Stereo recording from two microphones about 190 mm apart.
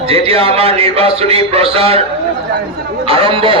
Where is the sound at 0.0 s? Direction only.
30° right (ahead or behind).